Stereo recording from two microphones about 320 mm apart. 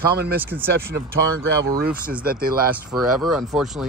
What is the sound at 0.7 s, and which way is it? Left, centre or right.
Speech, right.